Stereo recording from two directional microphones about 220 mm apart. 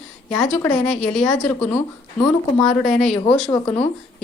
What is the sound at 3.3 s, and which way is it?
Speech, 25° left (ahead or behind).